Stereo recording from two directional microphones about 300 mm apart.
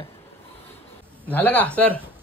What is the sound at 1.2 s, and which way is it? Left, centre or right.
Speech, centre.